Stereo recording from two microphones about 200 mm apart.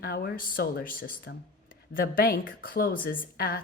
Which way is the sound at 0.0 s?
50° left (ahead or behind).